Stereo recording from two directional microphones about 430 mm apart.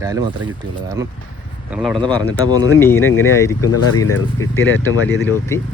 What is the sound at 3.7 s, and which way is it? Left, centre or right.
Speech, left.